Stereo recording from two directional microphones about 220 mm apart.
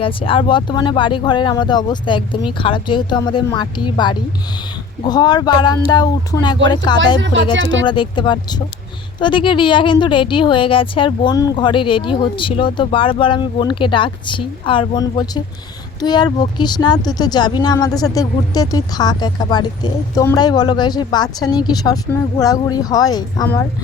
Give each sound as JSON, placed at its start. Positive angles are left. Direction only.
{"t": 0.0, "sound": "a woman's voice", "side_deg": 25}